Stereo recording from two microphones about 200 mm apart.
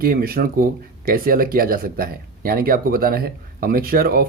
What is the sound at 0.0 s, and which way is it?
Speech, 45° right (ahead or behind).